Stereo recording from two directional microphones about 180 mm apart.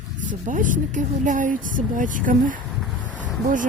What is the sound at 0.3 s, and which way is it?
Speech, 45° right (ahead or behind).